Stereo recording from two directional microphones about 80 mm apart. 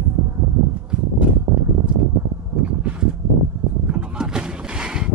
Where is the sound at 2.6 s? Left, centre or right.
Centre.